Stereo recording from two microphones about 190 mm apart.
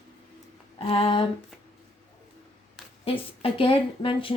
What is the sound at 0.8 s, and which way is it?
Speech, 30° left (ahead or behind).